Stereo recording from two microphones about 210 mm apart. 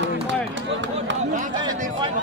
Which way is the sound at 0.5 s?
60° right (ahead or behind).